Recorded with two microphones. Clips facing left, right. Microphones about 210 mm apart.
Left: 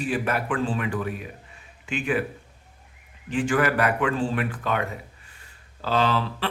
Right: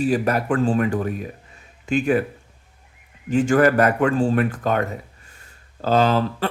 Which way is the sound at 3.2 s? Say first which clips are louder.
Right 7 dB; 45° right (ahead or behind).